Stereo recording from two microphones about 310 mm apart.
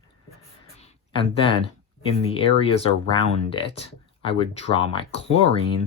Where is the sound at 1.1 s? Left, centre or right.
Centre.